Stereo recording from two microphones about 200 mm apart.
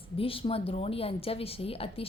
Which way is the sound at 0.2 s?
25° left (ahead or behind).